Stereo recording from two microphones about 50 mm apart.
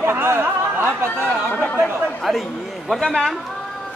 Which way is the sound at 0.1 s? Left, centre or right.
Right.